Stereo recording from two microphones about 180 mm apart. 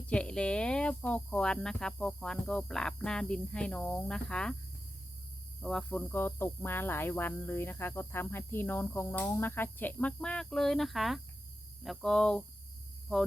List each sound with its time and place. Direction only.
0.1 s speech: 5° left (ahead or behind)
5.5 s speech: 5° left (ahead or behind)